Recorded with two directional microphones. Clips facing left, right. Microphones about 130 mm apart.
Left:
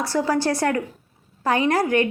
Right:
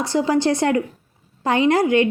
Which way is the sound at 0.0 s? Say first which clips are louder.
Right 3 dB; 20° right (ahead or behind).